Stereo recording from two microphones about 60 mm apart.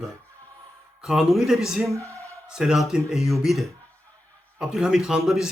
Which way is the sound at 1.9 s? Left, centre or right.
Right.